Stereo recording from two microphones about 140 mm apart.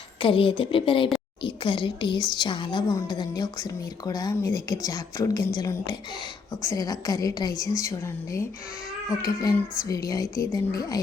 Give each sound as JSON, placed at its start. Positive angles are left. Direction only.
{"t": 0.2, "sound": "a woman's voice", "side_deg": 40}